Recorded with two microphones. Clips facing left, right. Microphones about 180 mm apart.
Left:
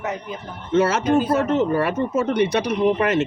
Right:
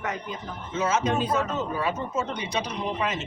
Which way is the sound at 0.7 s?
70° left (ahead or behind).